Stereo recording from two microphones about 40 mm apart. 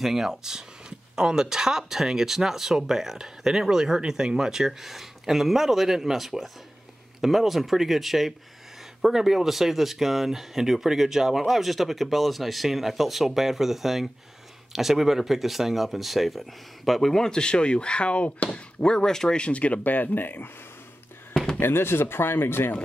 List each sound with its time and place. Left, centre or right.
0.0 s speech: centre; by 18.6 s left
18.8 s speech: centre
19.8 s speech: left
21.3 s a sound: centre
21.5 s speech: left